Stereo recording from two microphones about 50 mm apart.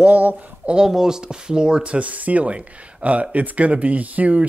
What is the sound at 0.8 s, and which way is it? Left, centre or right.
Speech, centre.